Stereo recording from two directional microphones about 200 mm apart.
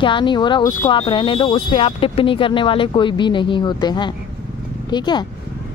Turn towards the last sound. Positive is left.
turn(degrees=20)  # may be behind; listen again after turning